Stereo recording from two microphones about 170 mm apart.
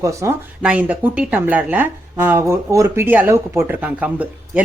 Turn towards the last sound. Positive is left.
turn(degrees=-10)  # may be behind; listen again after turning